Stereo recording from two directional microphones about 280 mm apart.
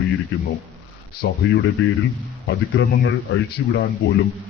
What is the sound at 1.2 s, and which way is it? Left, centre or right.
Speech, left.